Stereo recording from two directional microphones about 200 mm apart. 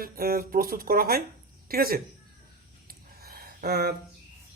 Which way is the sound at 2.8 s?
50° right (ahead or behind).